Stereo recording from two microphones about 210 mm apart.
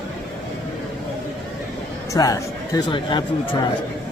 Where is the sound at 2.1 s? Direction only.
15° left (ahead or behind).